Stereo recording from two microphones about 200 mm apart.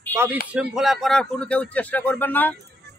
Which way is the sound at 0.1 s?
10° right (ahead or behind).